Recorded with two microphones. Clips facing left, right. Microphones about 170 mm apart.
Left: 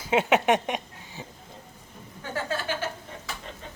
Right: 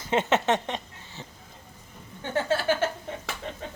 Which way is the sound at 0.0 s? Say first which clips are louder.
Left 2 dB; 10° left (ahead or behind).